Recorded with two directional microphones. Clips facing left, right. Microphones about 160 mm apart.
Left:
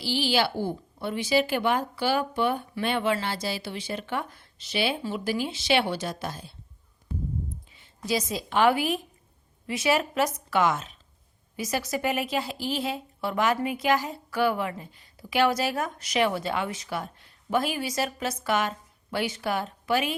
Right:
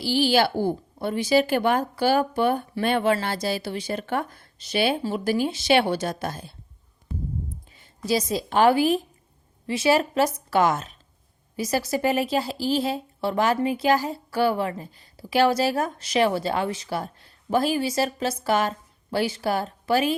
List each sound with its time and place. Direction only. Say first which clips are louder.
0.0 s speech: right 5 dB; 45° right (ahead or behind)
7.8 s a woman's voice: right 4 dB; 35° right (ahead or behind)